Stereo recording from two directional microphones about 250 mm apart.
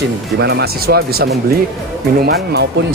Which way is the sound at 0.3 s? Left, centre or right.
Right.